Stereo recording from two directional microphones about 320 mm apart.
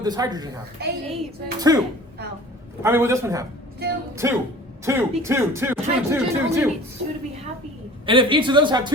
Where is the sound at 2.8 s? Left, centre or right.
Centre.